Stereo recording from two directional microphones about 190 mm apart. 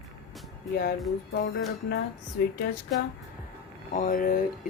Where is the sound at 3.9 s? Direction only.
45° left (ahead or behind).